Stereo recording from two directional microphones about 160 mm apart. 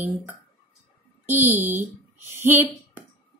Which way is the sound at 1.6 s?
50° right (ahead or behind).